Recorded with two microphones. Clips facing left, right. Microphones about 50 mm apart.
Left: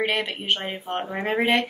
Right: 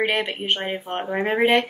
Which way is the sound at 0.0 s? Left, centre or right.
Centre.